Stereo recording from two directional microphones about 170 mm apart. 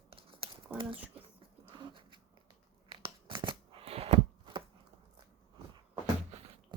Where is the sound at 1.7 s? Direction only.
30° right (ahead or behind).